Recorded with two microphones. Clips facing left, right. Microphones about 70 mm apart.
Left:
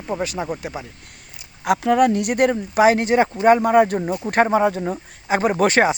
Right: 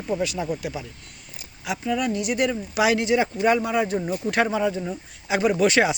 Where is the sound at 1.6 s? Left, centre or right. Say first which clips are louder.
Left 9 dB; left.